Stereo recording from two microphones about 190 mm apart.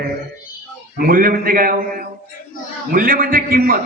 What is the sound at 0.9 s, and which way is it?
A man's voice, 50° right (ahead or behind).